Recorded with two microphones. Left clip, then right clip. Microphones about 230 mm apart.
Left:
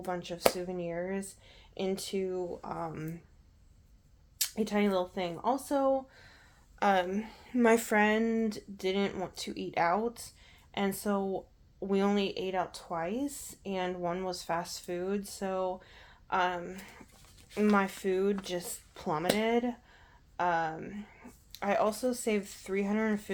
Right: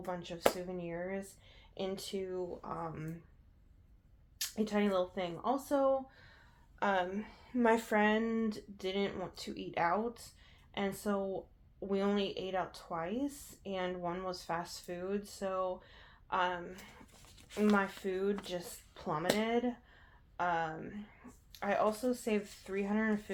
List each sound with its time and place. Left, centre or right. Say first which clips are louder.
0.0 s speech: left 4 dB; left
4.4 s speech: left 4 dB; left